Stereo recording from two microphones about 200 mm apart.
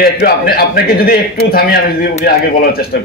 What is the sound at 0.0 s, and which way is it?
A man's voice, 50° left (ahead or behind).